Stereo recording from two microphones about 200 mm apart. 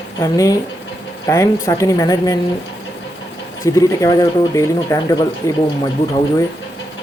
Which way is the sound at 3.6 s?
15° left (ahead or behind).